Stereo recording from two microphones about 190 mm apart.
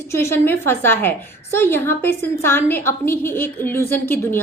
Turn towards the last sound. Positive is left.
turn(degrees=10)  # may be behind; listen again after turning